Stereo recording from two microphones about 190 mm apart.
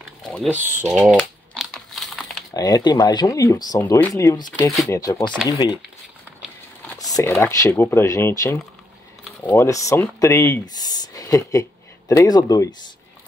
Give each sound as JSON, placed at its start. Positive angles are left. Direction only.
{"t": 0.2, "sound": "typing", "side_deg": 5}
{"t": 0.6, "sound": "speech", "side_deg": -10}
{"t": 1.1, "sound": "crumpling", "side_deg": 5}
{"t": 2.5, "sound": "speech", "side_deg": 20}
{"t": 7.2, "sound": "speech", "side_deg": 15}